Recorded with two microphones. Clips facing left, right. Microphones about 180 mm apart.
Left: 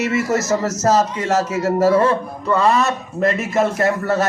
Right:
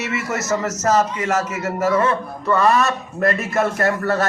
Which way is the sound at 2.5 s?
20° left (ahead or behind).